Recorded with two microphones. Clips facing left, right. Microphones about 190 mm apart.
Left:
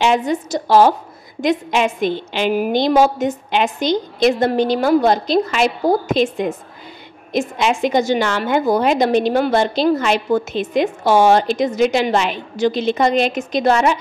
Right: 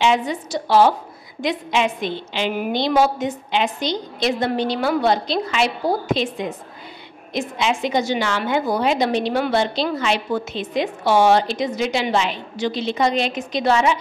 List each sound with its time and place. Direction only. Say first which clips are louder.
0.0 s a woman's voice: left 3 dB; 45° left (ahead or behind)